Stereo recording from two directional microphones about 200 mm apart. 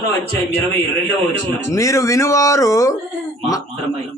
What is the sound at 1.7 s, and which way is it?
Speech, 15° left (ahead or behind).